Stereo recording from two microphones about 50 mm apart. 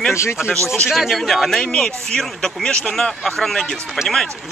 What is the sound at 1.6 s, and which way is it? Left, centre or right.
A man's voice, centre.